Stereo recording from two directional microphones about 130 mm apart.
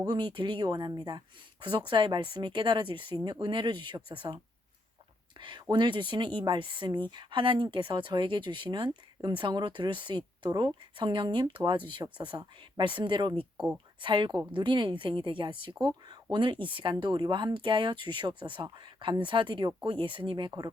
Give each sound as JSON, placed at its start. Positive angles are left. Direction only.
{"t": 0.0, "sound": "speech", "side_deg": -35}
{"t": 5.4, "sound": "speech", "side_deg": -35}